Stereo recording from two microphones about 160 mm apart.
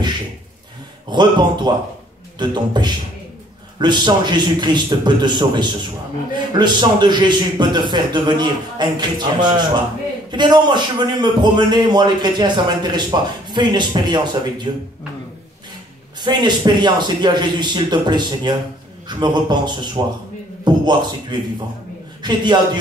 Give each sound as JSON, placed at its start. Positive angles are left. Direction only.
{"t": 1.1, "sound": "a man's voice", "side_deg": -25}
{"t": 16.2, "sound": "a man's voice", "side_deg": -25}